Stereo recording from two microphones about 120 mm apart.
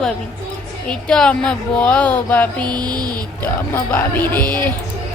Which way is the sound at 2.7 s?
35° right (ahead or behind).